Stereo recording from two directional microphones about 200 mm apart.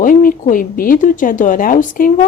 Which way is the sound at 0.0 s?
45° left (ahead or behind).